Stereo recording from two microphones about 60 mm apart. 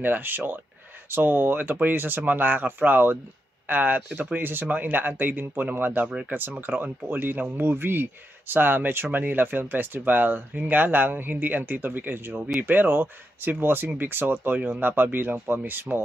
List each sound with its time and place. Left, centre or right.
0.0 s speech: right
6.0 s speech: centre
6.6 s speech: right